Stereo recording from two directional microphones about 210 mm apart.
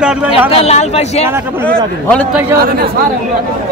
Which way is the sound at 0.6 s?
30° left (ahead or behind).